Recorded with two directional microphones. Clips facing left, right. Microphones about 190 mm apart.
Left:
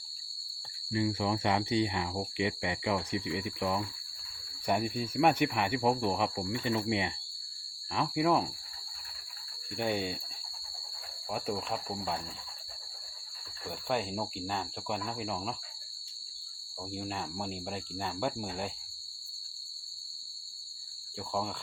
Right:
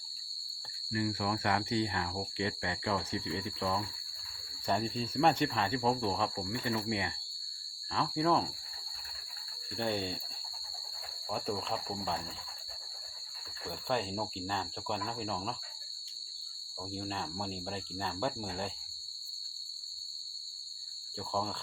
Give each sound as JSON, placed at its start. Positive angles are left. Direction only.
{"t": 0.9, "sound": "speech", "side_deg": 20}
{"t": 9.7, "sound": "speech", "side_deg": 10}
{"t": 11.3, "sound": "speech", "side_deg": 10}
{"t": 13.7, "sound": "speech", "side_deg": 10}
{"t": 16.9, "sound": "speech", "side_deg": 10}
{"t": 21.2, "sound": "speech", "side_deg": 10}